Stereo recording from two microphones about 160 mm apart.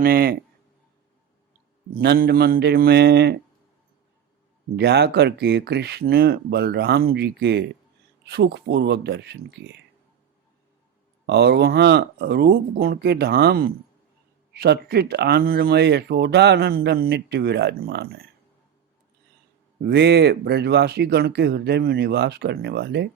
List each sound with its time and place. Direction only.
0.0 s speech: 70° right (ahead or behind)
1.9 s speech: 70° right (ahead or behind)
4.8 s speech: 90° right
11.3 s speech: 90° right; by 13.7 s 75° right (ahead or behind)
14.5 s speech: 85° right
19.8 s speech: 90° right